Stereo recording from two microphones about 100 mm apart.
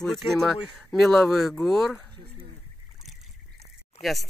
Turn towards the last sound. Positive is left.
turn(degrees=0)  # may be behind; listen again after turning